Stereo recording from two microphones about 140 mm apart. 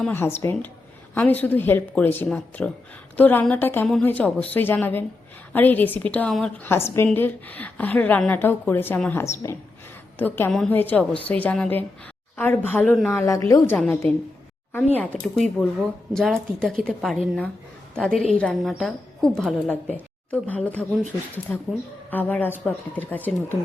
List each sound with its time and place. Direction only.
0.1 s a woman's voice: 15° left (ahead or behind)
6.7 s a woman's voice: 20° left (ahead or behind)
13.7 s a woman's voice: 10° left (ahead or behind)